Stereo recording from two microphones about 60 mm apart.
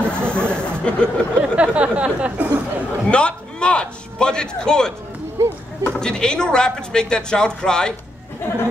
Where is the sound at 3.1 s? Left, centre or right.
Centre.